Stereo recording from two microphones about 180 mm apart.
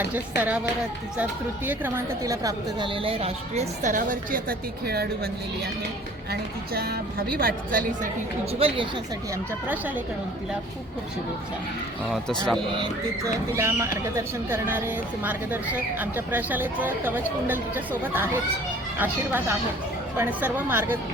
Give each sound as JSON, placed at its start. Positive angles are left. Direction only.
{"t": 0.0, "sound": "a woman's voice", "side_deg": -10}
{"t": 6.3, "sound": "a woman's voice", "side_deg": -60}
{"t": 8.5, "sound": "a woman's voice", "side_deg": -30}
{"t": 9.6, "sound": "speech", "side_deg": -10}
{"t": 12.0, "sound": "speech", "side_deg": 0}
{"t": 12.7, "sound": "speech", "side_deg": -20}